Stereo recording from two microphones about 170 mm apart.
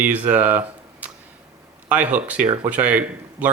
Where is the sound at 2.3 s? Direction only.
40° right (ahead or behind).